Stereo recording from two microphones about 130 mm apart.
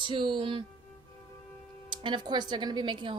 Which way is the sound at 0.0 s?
40° right (ahead or behind).